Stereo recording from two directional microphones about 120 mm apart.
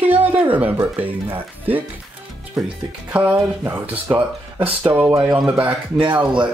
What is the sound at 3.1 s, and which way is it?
Speech, 10° right (ahead or behind).